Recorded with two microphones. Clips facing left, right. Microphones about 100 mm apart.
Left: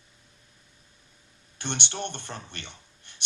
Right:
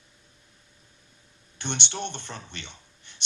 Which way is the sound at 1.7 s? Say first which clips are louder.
Even; 55° left (ahead or behind).